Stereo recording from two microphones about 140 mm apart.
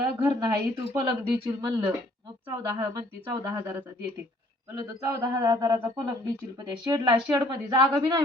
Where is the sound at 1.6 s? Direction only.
30° right (ahead or behind).